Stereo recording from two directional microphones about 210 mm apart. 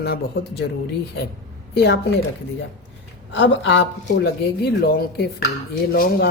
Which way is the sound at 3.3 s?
60° left (ahead or behind).